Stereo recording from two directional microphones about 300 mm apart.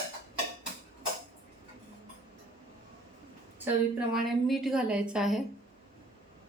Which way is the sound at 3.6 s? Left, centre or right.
Centre.